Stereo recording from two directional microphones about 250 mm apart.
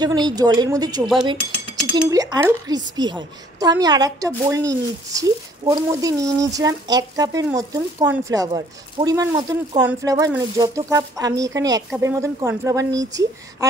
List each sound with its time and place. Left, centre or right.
0.0 s speech: centre
2.0 s speech: centre